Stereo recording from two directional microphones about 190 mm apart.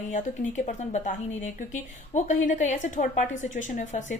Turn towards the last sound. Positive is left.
turn(degrees=40)  # may be behind; listen again after turning